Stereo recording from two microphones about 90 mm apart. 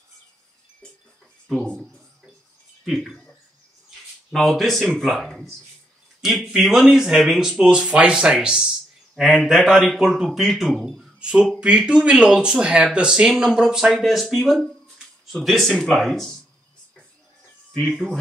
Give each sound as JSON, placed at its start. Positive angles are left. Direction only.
{"t": 1.5, "sound": "speech", "side_deg": 5}
{"t": 4.3, "sound": "speech", "side_deg": 0}
{"t": 17.7, "sound": "speech", "side_deg": 5}